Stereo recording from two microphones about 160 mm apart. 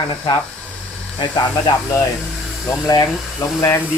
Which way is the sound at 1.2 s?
25° left (ahead or behind).